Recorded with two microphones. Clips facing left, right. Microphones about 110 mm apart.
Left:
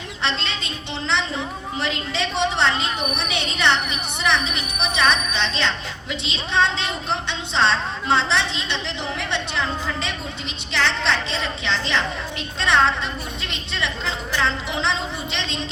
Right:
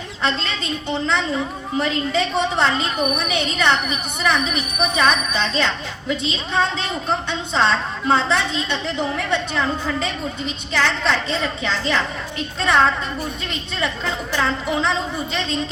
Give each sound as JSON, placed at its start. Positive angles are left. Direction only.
{"t": 0.6, "sound": "a woman's voice", "side_deg": -40}